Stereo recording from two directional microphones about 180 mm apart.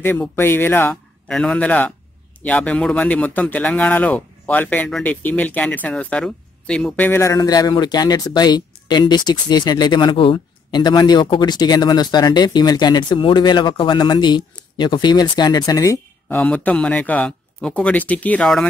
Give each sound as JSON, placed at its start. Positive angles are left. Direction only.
{"t": 0.0, "sound": "speech", "side_deg": 10}